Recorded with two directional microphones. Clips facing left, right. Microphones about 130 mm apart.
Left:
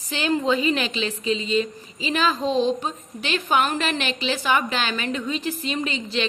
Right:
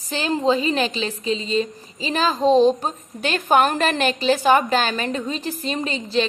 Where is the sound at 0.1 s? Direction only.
35° right (ahead or behind).